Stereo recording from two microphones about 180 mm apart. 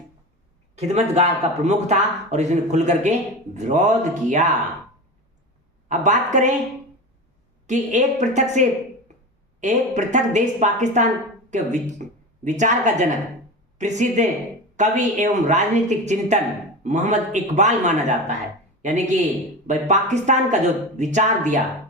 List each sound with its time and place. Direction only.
0.8 s a man's voice: 35° right (ahead or behind)
5.9 s a woman's voice: 45° right (ahead or behind)
7.7 s a man's voice: 40° right (ahead or behind)
19.6 s a man's voice: 40° right (ahead or behind)